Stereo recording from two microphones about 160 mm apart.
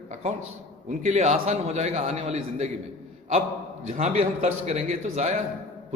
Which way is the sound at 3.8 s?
45° right (ahead or behind).